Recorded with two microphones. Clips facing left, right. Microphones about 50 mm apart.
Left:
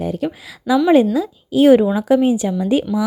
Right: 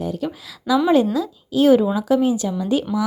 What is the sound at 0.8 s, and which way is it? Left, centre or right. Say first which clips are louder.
A woman's voice: left 5 dB; centre.